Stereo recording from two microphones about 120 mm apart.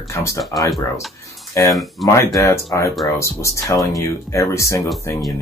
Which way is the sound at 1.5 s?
25° left (ahead or behind).